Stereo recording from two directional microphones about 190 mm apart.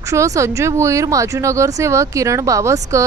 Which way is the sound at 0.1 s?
15° right (ahead or behind).